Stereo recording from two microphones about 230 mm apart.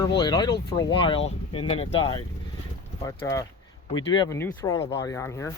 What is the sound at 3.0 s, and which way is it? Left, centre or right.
Speech, centre.